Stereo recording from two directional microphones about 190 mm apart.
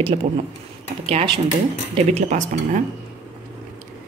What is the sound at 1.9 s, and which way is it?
Speech, 35° right (ahead or behind).